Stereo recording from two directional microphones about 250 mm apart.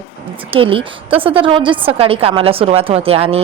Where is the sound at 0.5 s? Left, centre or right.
Right.